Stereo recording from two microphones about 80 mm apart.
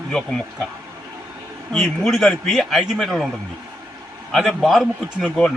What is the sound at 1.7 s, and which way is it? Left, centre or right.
Speech, centre.